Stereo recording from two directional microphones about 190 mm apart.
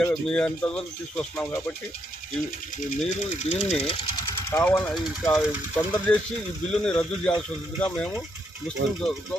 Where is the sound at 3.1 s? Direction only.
40° left (ahead or behind).